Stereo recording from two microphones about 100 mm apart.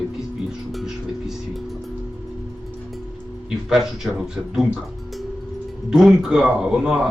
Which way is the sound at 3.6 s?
5° right (ahead or behind).